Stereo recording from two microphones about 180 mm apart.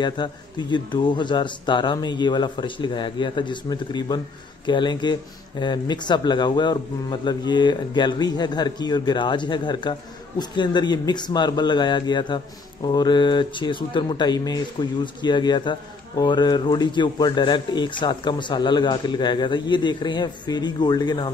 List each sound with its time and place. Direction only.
0.0 s speech: 25° left (ahead or behind)